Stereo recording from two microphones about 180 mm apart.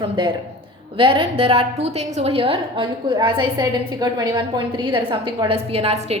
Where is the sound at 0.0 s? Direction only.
25° right (ahead or behind).